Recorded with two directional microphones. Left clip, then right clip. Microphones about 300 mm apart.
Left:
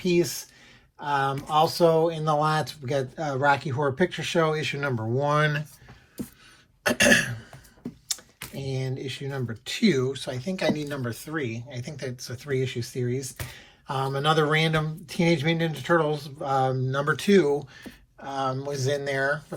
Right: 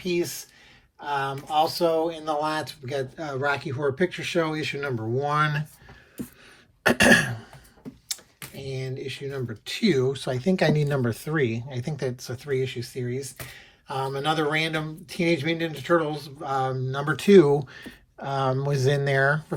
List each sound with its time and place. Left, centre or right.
0.0 s speech: centre
6.8 s speech: centre
8.0 s speech: centre